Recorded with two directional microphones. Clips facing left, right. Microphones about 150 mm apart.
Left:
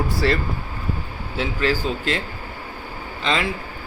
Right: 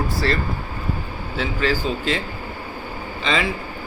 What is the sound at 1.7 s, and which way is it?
Speech, 50° left (ahead or behind).